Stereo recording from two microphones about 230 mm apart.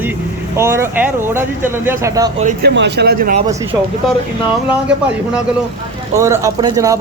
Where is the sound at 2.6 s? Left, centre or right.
Right.